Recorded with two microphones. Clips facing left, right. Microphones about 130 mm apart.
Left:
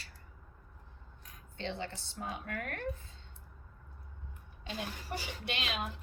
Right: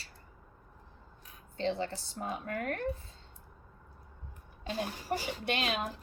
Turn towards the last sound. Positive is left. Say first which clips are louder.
# right 5 dB
turn(degrees=-40)  # may be behind; listen again after turning